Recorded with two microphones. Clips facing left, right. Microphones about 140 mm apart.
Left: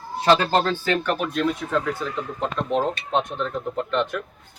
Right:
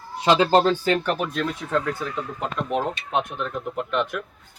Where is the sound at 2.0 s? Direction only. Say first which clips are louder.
Left 2 dB; 10° right (ahead or behind).